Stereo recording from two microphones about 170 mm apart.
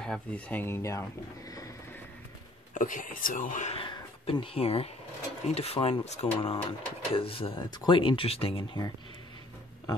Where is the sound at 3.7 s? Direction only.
30° left (ahead or behind).